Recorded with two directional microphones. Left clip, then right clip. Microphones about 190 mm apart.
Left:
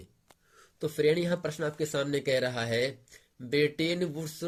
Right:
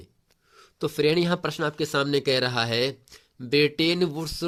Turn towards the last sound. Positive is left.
turn(degrees=-50)  # may be behind; listen again after turning